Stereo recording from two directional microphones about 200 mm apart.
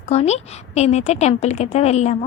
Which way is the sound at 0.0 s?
35° left (ahead or behind).